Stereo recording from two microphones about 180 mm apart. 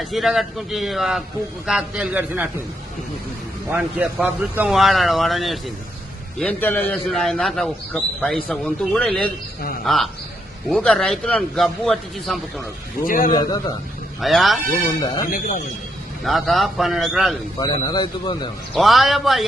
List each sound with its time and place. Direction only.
0.0 s a man's voice: centre (ahead or behind)
3.7 s a man's voice: 10° right (ahead or behind)
13.1 s a man's voice: 50° left (ahead or behind)
13.3 s speech: 20° left (ahead or behind)
14.2 s a man's voice: centre (ahead or behind)
15.3 s a man's voice: 45° left (ahead or behind)
16.2 s a man's voice: centre (ahead or behind)
17.6 s speech: 25° left (ahead or behind)
18.7 s a man's voice: centre (ahead or behind)